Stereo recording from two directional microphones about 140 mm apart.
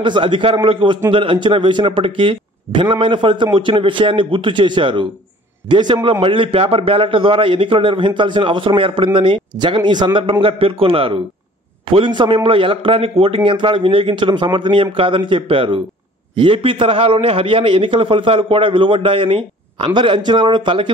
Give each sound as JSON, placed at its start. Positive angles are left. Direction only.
{"t": 0.0, "sound": "a man's voice", "side_deg": -35}